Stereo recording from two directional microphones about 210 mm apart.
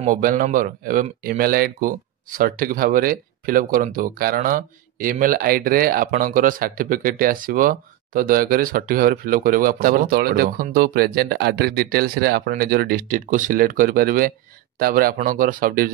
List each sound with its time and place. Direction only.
0.0 s speech: 40° right (ahead or behind)